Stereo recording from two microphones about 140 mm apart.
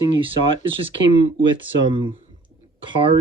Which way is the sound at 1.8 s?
35° right (ahead or behind).